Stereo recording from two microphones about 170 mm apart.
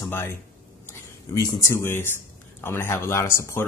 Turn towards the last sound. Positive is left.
turn(degrees=15)  # may be behind; listen again after turning